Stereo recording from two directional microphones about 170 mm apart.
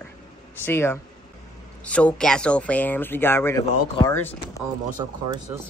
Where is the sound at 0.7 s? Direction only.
15° left (ahead or behind).